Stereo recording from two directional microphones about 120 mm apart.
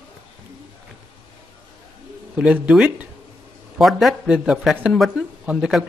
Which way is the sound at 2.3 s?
10° right (ahead or behind).